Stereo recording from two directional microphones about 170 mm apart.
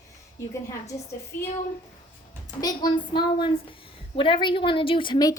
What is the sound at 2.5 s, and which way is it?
A woman's voice, 25° left (ahead or behind).